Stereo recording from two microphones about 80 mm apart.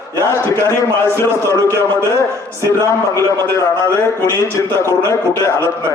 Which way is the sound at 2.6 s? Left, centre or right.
Left.